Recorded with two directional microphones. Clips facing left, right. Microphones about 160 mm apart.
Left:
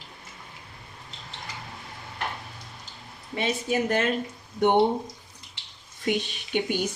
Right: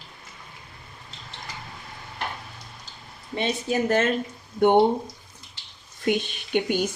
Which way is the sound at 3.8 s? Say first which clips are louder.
Right 5 dB; 45° right (ahead or behind).